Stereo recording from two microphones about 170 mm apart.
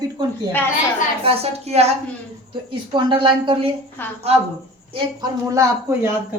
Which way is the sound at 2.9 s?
30° right (ahead or behind).